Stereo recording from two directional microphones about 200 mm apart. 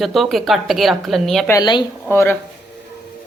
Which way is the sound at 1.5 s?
20° left (ahead or behind).